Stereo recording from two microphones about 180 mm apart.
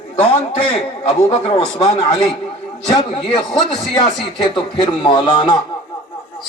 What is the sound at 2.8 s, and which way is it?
Speech, 25° left (ahead or behind).